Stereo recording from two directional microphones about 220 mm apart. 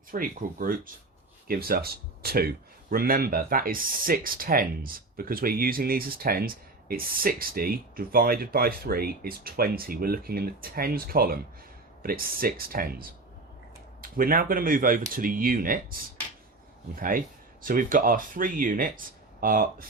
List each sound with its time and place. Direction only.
0.1 s speech: 40° right (ahead or behind)